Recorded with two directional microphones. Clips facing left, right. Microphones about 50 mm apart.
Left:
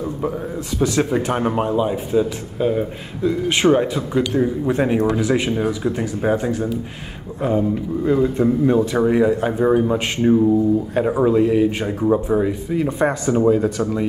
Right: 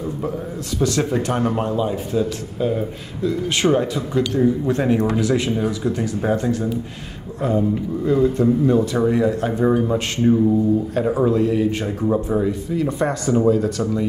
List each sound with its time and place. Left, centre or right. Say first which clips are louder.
0.7 s speech: left 1 dB; centre